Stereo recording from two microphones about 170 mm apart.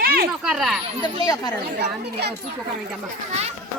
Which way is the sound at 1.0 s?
25° left (ahead or behind).